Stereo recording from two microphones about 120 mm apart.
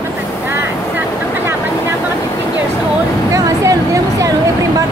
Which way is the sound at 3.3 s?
25° right (ahead or behind).